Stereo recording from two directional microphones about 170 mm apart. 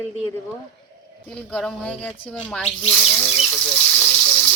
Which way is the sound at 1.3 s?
5° left (ahead or behind).